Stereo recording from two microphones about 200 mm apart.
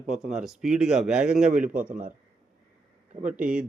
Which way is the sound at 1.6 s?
45° right (ahead or behind).